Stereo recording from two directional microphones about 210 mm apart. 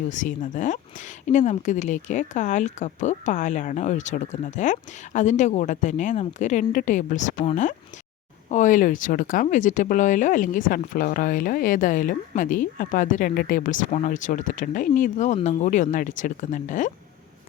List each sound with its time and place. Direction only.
0.1 s speech: 35° left (ahead or behind)